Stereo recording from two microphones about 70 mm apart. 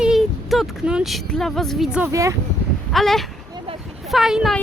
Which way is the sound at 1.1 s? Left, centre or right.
Centre.